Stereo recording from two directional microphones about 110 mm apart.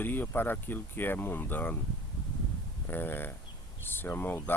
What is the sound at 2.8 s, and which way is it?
Speech, 20° left (ahead or behind).